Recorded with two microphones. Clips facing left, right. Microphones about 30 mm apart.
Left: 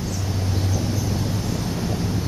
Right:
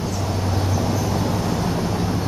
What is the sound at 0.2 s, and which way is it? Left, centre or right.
Vehicle, right.